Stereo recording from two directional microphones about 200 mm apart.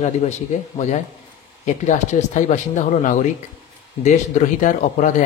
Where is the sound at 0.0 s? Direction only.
35° left (ahead or behind).